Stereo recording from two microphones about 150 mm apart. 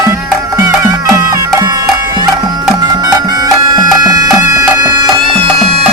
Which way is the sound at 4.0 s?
25° right (ahead or behind).